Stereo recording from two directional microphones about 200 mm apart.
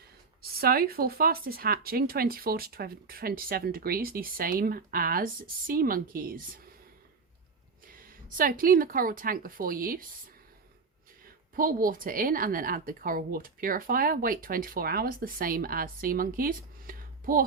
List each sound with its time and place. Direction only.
0.5 s speech: 50° right (ahead or behind)
8.0 s speech: 45° right (ahead or behind)
11.5 s speech: 45° right (ahead or behind)